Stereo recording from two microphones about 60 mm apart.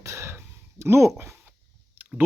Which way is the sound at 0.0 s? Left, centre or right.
Right.